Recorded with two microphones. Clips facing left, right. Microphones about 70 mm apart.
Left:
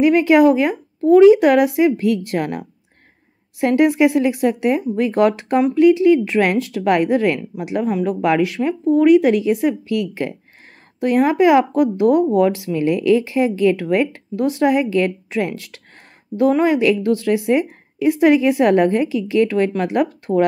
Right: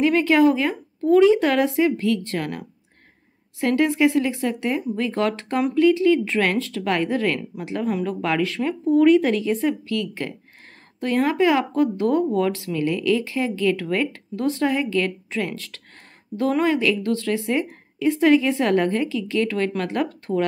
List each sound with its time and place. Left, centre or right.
0.0 s speech: centre
3.6 s speech: centre